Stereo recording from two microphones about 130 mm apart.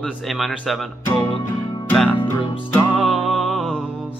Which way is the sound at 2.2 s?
40° left (ahead or behind).